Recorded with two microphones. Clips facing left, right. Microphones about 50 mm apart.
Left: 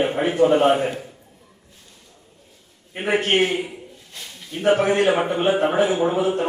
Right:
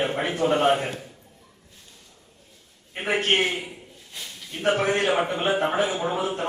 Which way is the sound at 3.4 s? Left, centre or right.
Centre.